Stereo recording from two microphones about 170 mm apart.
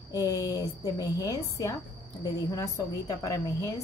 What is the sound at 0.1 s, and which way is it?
A woman's voice, 20° left (ahead or behind).